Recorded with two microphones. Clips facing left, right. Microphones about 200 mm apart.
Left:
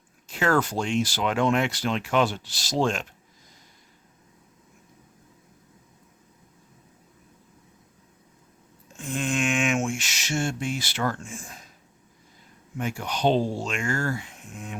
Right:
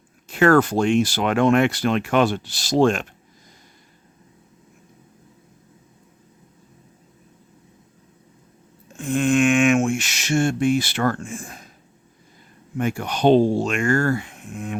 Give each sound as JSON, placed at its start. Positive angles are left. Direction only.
{"t": 0.3, "sound": "speech", "side_deg": -60}
{"t": 9.0, "sound": "a sound", "side_deg": -60}
{"t": 12.7, "sound": "speech", "side_deg": -55}